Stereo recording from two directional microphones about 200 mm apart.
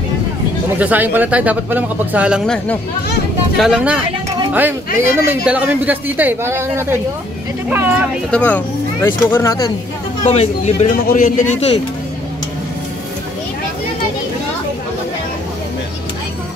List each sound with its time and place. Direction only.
0.7 s a man's voice: 10° right (ahead or behind)
8.3 s speech: 5° left (ahead or behind)
10.2 s a man's voice: 35° left (ahead or behind)